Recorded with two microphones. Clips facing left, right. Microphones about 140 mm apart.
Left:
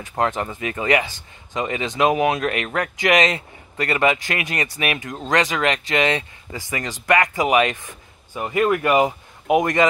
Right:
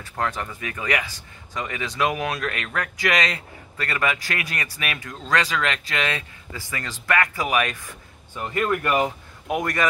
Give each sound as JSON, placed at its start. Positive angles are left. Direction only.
{"t": 0.0, "sound": "speech", "side_deg": 20}